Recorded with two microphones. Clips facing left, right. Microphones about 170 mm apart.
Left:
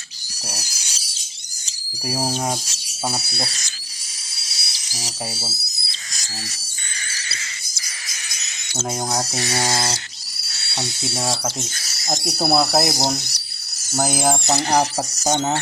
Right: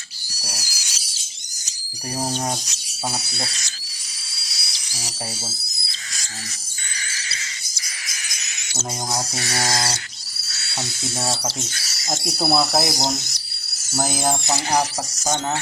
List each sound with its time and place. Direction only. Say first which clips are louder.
0.4 s a sound: left 3 dB; 25° left (ahead or behind)
2.0 s speech: left 2 dB; 5° left (ahead or behind)
4.6 s dental drill: left 2 dB; 20° left (ahead or behind)
5.3 s speech: left 1 dB; 10° left (ahead or behind)
9.5 s speech: even; 25° left (ahead or behind)
10.5 s a sound: left 2 dB; 30° left (ahead or behind)
12.2 s speech: left 1 dB; centre (ahead or behind)